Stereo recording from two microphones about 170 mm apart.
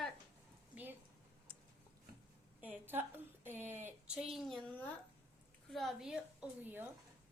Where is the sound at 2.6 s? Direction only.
10° right (ahead or behind).